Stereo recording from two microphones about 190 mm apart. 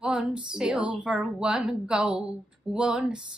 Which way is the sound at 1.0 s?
5° right (ahead or behind).